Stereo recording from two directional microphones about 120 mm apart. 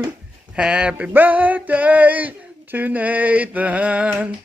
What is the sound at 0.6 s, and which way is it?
Male singing, 10° right (ahead or behind).